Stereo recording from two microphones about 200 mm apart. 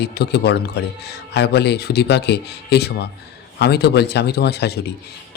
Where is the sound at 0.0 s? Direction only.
55° left (ahead or behind).